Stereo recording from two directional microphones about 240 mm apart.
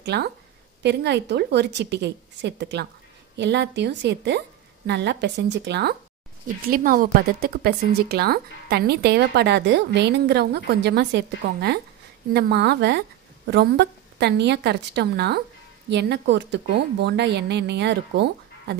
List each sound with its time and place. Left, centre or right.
0.0 s a woman's voice: right